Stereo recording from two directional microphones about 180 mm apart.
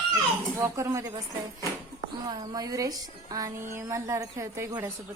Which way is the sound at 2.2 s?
25° right (ahead or behind).